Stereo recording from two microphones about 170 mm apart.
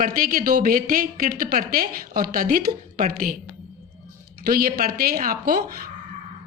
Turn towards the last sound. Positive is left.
turn(degrees=-55)  # may be behind; listen again after turning